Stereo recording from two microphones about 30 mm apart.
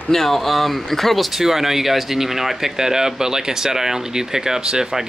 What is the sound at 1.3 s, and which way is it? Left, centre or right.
Speech, centre.